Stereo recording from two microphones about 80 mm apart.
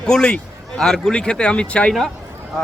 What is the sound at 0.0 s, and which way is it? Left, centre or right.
Speech, centre.